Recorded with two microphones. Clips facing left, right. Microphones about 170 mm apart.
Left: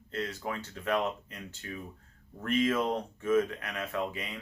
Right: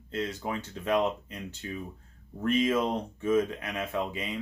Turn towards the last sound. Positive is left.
turn(degrees=-20)  # may be behind; listen again after turning